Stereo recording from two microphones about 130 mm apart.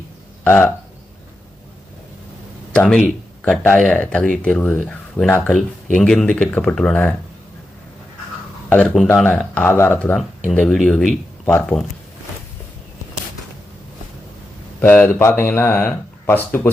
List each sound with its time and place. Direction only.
0.4 s a sound: 15° left (ahead or behind)
2.7 s speech: 5° left (ahead or behind)
8.7 s speech: 10° left (ahead or behind)
14.8 s speech: 15° left (ahead or behind)